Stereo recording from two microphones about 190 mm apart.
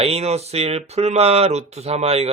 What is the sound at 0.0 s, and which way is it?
Speech, 35° right (ahead or behind).